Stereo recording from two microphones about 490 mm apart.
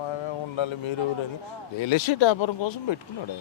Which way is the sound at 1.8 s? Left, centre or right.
Left.